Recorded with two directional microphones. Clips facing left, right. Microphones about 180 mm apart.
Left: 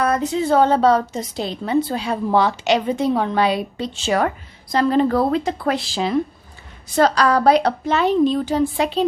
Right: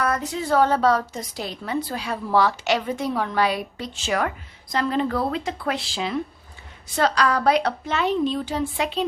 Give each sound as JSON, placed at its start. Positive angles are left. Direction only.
{"t": 0.0, "sound": "a woman's voice", "side_deg": 25}